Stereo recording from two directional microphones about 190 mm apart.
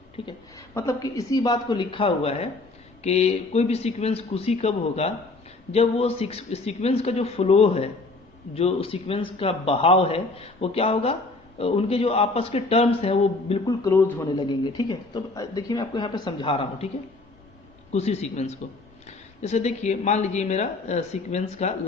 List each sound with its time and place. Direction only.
0.2 s speech: 25° left (ahead or behind)
0.7 s a man's voice: 15° left (ahead or behind); by 13.7 s 30° left (ahead or behind)
13.8 s a man's voice: 15° left (ahead or behind); by 16.9 s 30° left (ahead or behind)
17.9 s a man's voice: 35° left (ahead or behind)